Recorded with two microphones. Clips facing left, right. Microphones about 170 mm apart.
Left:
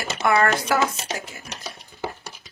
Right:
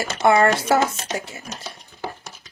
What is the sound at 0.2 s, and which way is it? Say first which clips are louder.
Speech: right 4 dB; 30° right (ahead or behind).